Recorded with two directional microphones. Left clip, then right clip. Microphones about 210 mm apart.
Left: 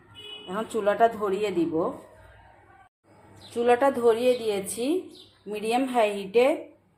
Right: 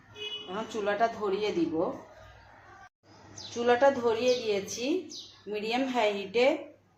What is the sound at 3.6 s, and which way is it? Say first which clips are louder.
A woman's voice: left 3 dB; 40° left (ahead or behind).